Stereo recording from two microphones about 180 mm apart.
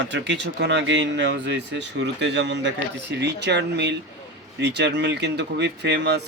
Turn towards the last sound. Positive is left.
turn(degrees=-70)  # may be behind; listen again after turning